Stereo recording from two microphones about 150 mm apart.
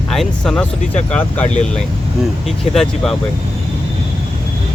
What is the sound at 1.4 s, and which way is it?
Speech, 50° left (ahead or behind).